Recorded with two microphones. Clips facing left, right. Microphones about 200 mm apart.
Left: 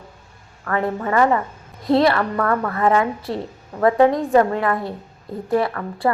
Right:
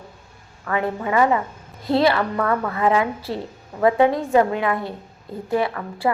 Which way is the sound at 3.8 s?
15° right (ahead or behind).